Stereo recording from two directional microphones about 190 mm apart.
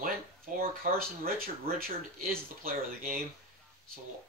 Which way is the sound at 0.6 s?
50° right (ahead or behind).